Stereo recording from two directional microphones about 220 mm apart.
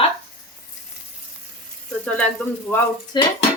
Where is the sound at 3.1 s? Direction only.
20° left (ahead or behind).